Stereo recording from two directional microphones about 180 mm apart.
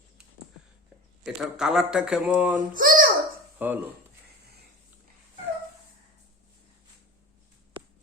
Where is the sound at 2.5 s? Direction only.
50° right (ahead or behind).